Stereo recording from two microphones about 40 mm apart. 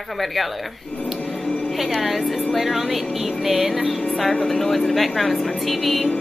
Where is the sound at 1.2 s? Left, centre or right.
Centre.